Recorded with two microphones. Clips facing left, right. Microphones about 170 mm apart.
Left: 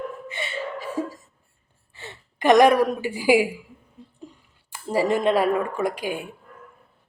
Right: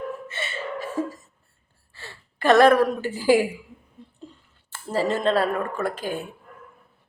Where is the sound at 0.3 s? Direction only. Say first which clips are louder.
Left 1 dB; 15° left (ahead or behind).